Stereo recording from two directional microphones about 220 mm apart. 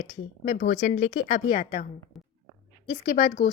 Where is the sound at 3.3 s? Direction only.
40° left (ahead or behind).